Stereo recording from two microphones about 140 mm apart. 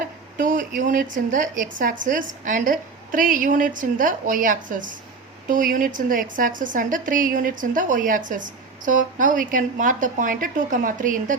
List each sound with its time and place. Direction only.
0.3 s a woman's voice: 75° right (ahead or behind)